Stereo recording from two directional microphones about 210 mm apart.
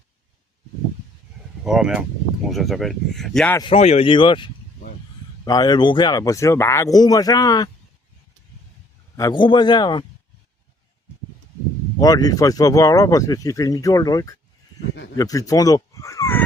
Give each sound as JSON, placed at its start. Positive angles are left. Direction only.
{"t": 1.6, "sound": "speech", "side_deg": -5}
{"t": 3.6, "sound": "speech", "side_deg": 25}
{"t": 9.1, "sound": "speech", "side_deg": 20}
{"t": 11.9, "sound": "speech", "side_deg": 15}